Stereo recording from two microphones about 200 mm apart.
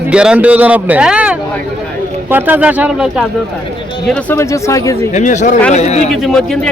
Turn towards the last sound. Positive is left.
turn(degrees=0)  # may be behind; listen again after turning